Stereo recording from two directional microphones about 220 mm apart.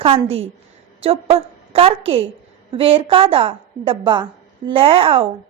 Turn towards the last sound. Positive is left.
turn(degrees=-25)  # may be behind; listen again after turning